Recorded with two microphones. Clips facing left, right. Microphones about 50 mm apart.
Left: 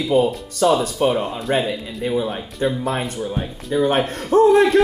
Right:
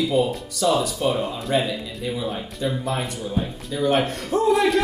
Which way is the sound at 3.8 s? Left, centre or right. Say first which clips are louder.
Right 2 dB; left.